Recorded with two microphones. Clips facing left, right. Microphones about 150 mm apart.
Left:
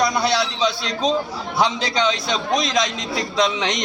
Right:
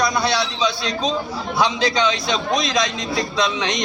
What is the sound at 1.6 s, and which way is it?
A man's voice, 25° left (ahead or behind).